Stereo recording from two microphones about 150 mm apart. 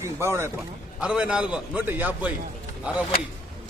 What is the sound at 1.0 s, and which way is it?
A man's voice, 5° right (ahead or behind).